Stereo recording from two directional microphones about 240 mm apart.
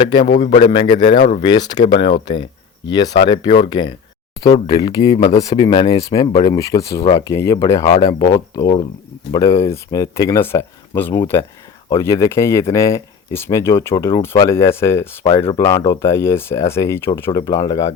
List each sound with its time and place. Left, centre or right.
0.0 s speech: centre